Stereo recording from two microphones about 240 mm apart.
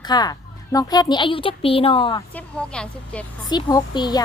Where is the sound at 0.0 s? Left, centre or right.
Centre.